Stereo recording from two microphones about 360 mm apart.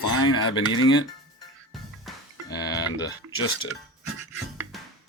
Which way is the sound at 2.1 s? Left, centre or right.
Centre.